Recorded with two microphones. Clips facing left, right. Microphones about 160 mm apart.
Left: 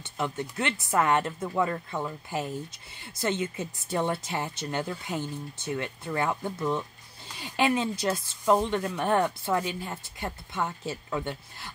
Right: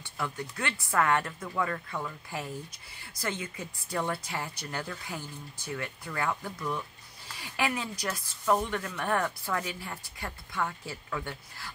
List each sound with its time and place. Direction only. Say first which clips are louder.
0.0 s speech: left 4 dB; 20° left (ahead or behind)